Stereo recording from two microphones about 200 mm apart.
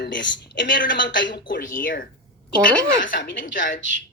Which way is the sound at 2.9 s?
65° left (ahead or behind).